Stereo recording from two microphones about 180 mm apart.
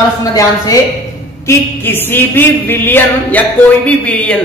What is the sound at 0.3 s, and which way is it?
Speech, 20° left (ahead or behind).